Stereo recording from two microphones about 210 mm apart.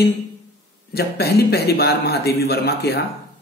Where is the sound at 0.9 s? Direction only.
50° left (ahead or behind).